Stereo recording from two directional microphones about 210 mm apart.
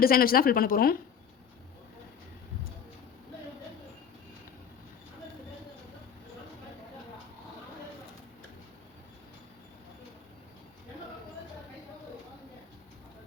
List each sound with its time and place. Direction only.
0.0 s speech: 45° left (ahead or behind)